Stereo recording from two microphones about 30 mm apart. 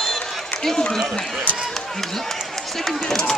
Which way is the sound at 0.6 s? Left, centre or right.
Centre.